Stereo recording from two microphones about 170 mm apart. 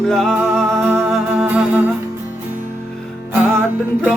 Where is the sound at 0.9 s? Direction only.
10° right (ahead or behind).